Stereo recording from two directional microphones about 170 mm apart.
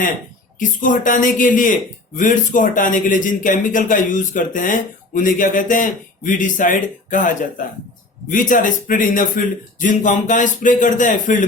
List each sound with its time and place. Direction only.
0.8 s speech: 50° left (ahead or behind)